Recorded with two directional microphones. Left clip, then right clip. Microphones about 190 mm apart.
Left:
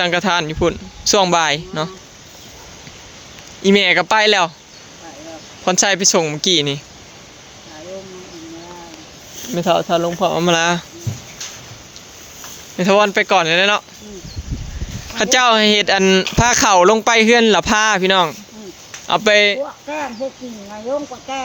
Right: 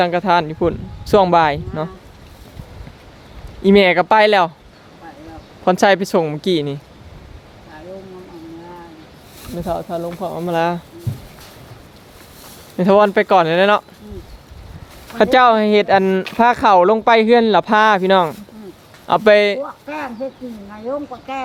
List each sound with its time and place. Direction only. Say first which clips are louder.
0.0 s speech: right 1 dB; 5° right (ahead or behind)
3.6 s speech: right 1 dB; 15° right (ahead or behind)
5.6 s speech: right 2 dB; 15° right (ahead or behind)
9.6 s speech: left 7 dB; 25° left (ahead or behind)
10.6 s speech: left 2 dB; centre (ahead or behind)
12.7 s speech: right 1 dB; 20° right (ahead or behind)
15.2 s speech: right 1 dB; 5° right (ahead or behind)